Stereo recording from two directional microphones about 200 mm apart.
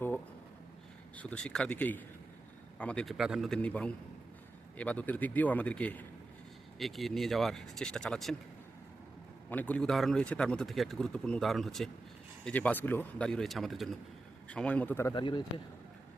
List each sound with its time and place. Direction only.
1.1 s speech: 5° left (ahead or behind)
9.5 s speech: 5° left (ahead or behind)
15.1 s speech: 25° left (ahead or behind)